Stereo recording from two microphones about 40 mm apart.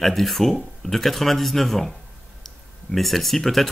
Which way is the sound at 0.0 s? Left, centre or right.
Centre.